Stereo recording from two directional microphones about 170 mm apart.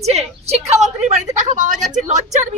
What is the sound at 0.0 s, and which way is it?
A woman's voice, 40° right (ahead or behind).